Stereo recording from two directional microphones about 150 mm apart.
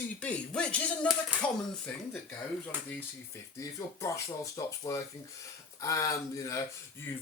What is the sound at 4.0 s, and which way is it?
Speech, 20° left (ahead or behind).